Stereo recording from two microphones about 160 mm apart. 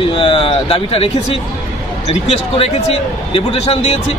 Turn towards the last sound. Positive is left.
turn(degrees=40)  # may be behind; listen again after turning